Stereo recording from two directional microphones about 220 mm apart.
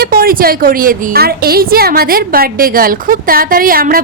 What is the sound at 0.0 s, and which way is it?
A woman's voice, 40° right (ahead or behind).